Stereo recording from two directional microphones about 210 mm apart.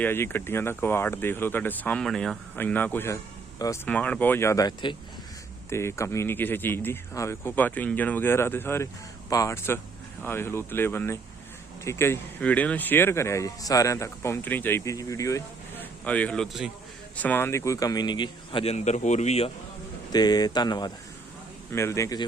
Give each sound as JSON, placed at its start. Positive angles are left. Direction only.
{"t": 0.0, "sound": "speech", "side_deg": 10}
{"t": 17.2, "sound": "speech", "side_deg": 10}
{"t": 20.1, "sound": "speech", "side_deg": 20}